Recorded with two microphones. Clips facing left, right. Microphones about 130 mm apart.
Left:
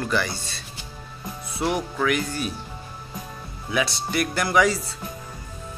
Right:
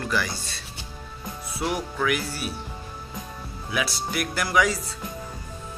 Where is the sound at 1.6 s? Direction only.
Centre (ahead or behind).